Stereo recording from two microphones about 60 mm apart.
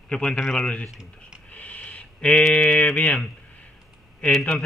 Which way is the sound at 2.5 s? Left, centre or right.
Centre.